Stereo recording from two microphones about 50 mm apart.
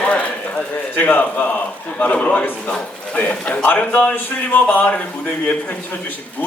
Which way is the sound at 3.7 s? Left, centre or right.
Left.